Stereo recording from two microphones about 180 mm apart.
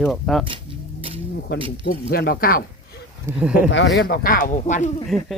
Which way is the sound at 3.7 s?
75° left (ahead or behind).